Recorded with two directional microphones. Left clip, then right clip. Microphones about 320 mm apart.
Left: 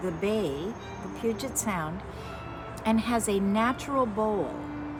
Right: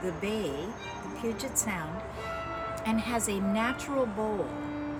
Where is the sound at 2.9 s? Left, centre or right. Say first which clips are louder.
Left 6 dB; centre.